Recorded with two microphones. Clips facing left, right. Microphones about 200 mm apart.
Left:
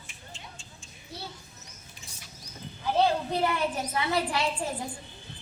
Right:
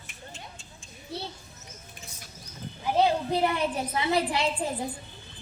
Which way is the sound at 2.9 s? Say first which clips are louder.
Right 1 dB; 15° right (ahead or behind).